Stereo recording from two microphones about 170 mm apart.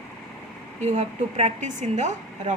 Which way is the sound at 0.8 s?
40° right (ahead or behind).